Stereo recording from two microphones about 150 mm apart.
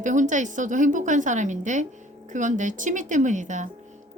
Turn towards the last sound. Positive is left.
turn(degrees=-55)  # may be behind; listen again after turning